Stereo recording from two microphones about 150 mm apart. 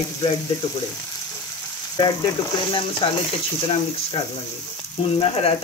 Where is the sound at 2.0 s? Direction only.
25° left (ahead or behind).